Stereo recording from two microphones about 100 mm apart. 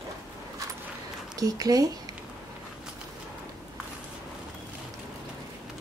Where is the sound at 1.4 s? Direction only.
40° right (ahead or behind).